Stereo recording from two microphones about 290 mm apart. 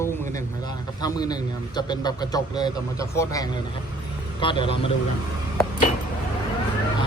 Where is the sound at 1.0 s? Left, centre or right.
Centre.